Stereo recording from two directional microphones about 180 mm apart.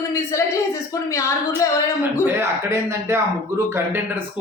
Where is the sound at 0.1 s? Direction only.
15° left (ahead or behind).